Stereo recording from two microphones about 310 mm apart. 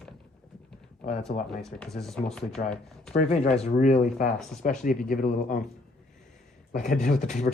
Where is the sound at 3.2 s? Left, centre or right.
Left.